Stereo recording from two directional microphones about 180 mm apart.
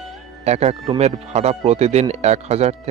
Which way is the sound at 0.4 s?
35° right (ahead or behind).